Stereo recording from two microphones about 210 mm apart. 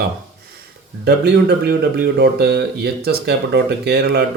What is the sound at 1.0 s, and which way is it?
Speech, 50° right (ahead or behind).